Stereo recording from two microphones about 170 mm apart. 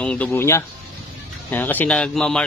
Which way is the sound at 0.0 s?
5° left (ahead or behind).